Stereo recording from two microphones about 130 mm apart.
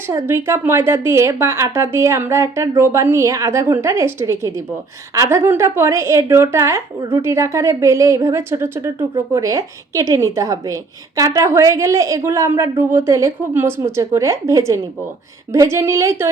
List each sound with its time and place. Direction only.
0.1 s a woman's voice: 25° right (ahead or behind)